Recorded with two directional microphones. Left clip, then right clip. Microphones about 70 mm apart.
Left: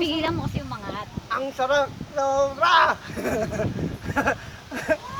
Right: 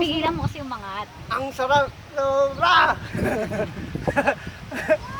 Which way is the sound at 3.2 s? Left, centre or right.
Left.